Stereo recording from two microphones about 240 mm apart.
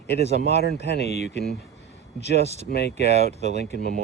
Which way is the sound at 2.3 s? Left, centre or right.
Right.